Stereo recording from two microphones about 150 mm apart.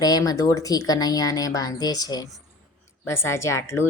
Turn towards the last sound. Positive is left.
turn(degrees=20)  # may be behind; listen again after turning